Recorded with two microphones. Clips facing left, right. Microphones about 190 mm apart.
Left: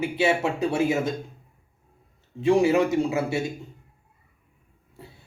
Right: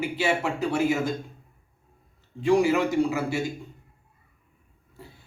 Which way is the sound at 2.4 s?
25° left (ahead or behind).